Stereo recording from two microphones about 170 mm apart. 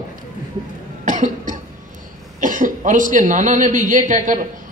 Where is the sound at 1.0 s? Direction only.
50° right (ahead or behind).